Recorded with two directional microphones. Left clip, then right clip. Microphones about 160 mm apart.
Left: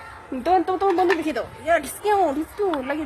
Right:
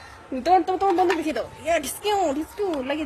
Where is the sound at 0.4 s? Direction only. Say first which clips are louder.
Even; 25° right (ahead or behind).